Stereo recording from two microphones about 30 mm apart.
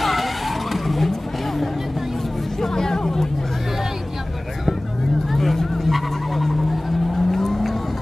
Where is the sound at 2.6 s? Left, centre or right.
Centre.